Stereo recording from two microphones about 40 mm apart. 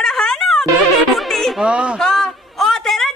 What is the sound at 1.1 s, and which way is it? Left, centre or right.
Music, centre.